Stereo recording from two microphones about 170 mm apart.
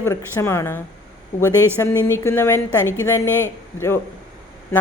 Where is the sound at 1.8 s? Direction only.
15° left (ahead or behind).